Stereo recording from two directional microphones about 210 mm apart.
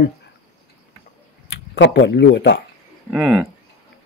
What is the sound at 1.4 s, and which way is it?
Speech, 60° left (ahead or behind).